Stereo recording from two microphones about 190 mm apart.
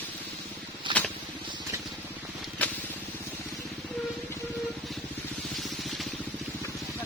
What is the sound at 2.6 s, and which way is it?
Vehicle, 10° left (ahead or behind).